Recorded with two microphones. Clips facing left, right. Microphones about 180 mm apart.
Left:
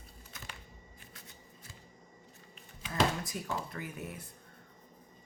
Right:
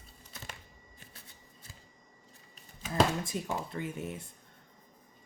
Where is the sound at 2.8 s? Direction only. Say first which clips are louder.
Right 4 dB; 45° right (ahead or behind).